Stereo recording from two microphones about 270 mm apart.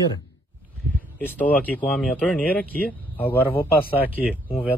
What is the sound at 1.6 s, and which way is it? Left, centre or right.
Speech, centre.